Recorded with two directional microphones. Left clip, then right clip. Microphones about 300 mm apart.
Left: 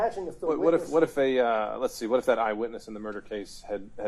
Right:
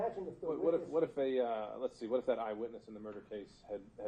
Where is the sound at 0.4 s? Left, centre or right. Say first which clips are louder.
Left 10 dB; left.